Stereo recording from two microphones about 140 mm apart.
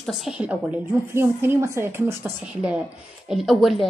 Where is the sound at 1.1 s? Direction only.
20° right (ahead or behind).